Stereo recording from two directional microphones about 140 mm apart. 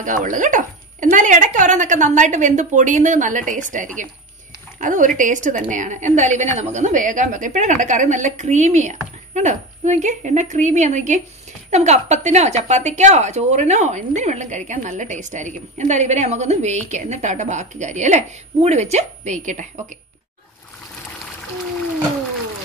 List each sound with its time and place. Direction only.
0.0 s a woman's voice: 65° right (ahead or behind)